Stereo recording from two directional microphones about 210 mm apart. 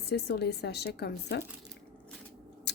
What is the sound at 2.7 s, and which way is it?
Chewing, 55° left (ahead or behind).